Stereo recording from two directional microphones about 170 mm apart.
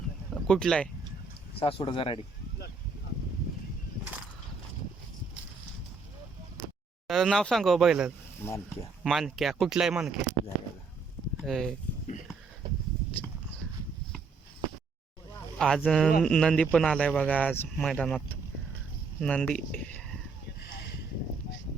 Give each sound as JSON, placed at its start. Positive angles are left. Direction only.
{"t": 0.3, "sound": "speech", "side_deg": 5}
{"t": 1.5, "sound": "speech", "side_deg": 30}
{"t": 7.1, "sound": "speech", "side_deg": 0}
{"t": 8.4, "sound": "speech", "side_deg": 15}
{"t": 9.0, "sound": "speech", "side_deg": 0}
{"t": 11.4, "sound": "speech", "side_deg": 0}
{"t": 15.5, "sound": "speech", "side_deg": 5}
{"t": 20.6, "sound": "a sound", "side_deg": 75}